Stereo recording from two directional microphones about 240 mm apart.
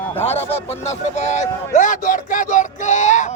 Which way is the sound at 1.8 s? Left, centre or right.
Left.